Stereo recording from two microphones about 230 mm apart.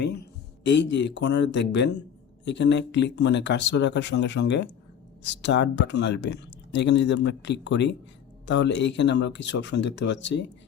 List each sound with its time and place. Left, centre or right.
0.0 s speech: left